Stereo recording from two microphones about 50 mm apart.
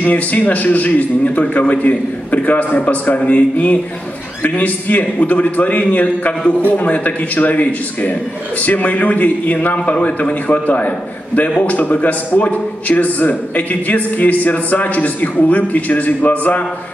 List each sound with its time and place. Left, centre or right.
0.0 s a man's voice: left